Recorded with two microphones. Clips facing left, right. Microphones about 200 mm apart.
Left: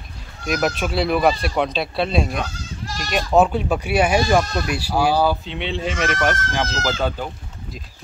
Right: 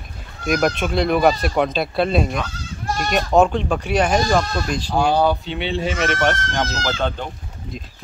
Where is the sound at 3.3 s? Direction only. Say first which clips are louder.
Even; 5° left (ahead or behind).